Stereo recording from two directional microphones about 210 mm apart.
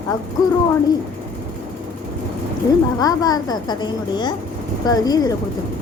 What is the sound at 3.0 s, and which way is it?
A woman's voice, 20° left (ahead or behind).